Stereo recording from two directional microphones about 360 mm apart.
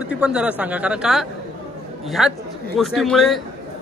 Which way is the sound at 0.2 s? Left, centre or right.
Centre.